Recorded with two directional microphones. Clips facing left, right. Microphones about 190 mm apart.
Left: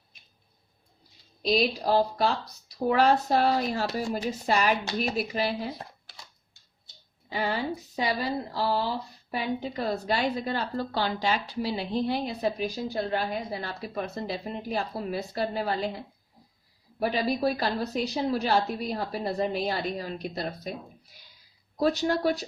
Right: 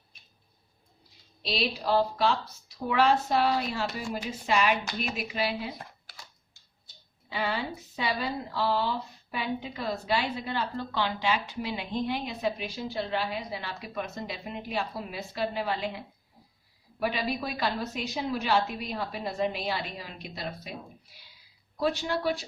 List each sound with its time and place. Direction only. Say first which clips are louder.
1.4 s a woman's voice: left 6 dB; 45° left (ahead or behind)
7.3 s a woman's voice: left 3 dB; 40° left (ahead or behind)
17.0 s a woman's voice: left 4 dB; 40° left (ahead or behind)
21.8 s a woman's voice: left 4 dB; 40° left (ahead or behind)